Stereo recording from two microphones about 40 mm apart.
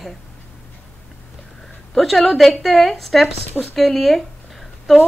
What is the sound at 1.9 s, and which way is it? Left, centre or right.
A woman's voice, centre.